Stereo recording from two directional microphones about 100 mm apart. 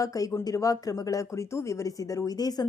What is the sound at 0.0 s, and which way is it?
Speech, 35° left (ahead or behind).